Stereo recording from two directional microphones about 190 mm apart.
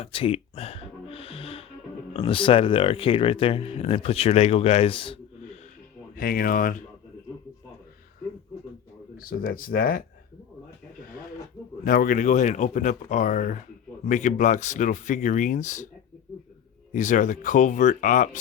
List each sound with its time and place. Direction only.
0.0 s music: 30° left (ahead or behind)
2.1 s speech: 30° left (ahead or behind)
6.1 s speech: 50° left (ahead or behind)
9.1 s speech: 50° left (ahead or behind)
11.9 s speech: 45° left (ahead or behind)
16.9 s speech: 40° left (ahead or behind)